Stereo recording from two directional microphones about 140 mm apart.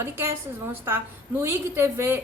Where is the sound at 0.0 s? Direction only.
15° right (ahead or behind).